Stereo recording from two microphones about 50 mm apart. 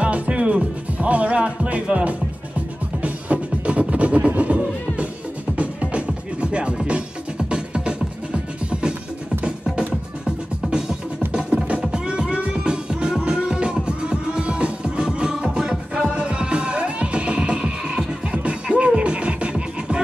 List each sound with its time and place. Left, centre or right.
0.0 s music: right
10.2 s music: centre